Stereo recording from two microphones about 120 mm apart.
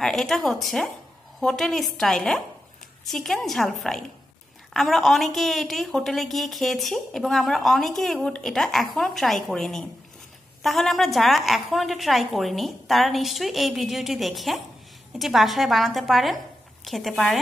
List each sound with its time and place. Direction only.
0.0 s a woman's voice: 5° left (ahead or behind)